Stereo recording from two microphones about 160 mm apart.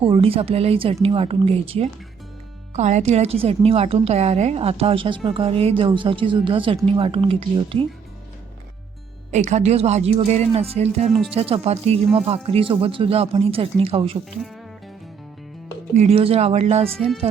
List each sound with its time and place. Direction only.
0.0 s a woman's voice: 35° right (ahead or behind)
9.3 s a woman's voice: 45° right (ahead or behind)
14.3 s speech: centre (ahead or behind)
16.0 s a woman's voice: 40° right (ahead or behind)